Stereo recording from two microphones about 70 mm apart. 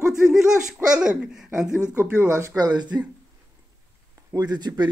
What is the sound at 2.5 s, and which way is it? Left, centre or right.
Speech, right.